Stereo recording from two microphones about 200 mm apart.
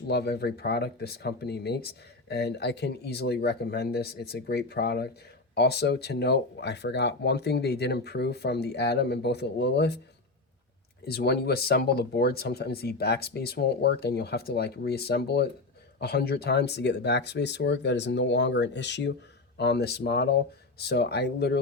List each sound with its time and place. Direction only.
0.1 s speech: 55° left (ahead or behind)
11.0 s speech: 55° left (ahead or behind)